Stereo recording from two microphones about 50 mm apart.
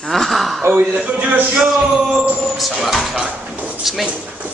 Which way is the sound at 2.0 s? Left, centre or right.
Centre.